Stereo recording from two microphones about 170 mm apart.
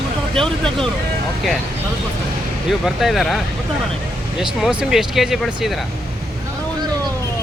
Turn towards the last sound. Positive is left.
turn(degrees=-5)  # may be behind; listen again after turning